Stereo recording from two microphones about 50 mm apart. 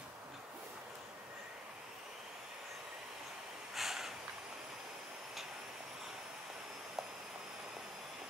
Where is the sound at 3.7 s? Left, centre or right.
Centre.